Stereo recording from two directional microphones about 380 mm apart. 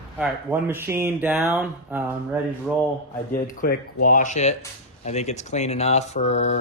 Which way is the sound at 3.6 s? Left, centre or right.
Left.